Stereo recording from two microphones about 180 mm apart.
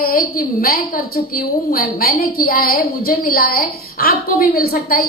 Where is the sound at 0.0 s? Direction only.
55° left (ahead or behind).